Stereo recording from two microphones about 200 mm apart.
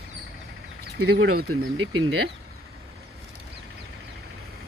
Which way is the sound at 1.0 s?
55° right (ahead or behind).